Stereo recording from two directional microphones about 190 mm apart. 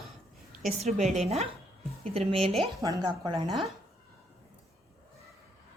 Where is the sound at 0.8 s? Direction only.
35° right (ahead or behind).